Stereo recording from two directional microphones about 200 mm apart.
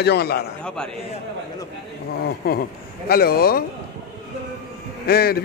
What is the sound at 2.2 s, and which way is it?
A man's voice, 50° left (ahead or behind).